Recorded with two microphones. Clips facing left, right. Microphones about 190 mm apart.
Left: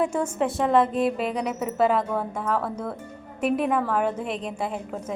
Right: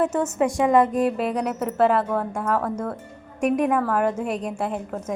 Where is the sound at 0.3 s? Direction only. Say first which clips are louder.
Right 3 dB; 10° right (ahead or behind).